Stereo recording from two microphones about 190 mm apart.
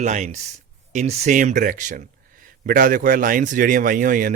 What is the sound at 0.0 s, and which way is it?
Speech, 40° right (ahead or behind).